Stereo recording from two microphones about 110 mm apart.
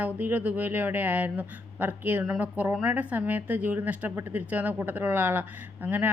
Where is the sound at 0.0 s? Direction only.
15° right (ahead or behind).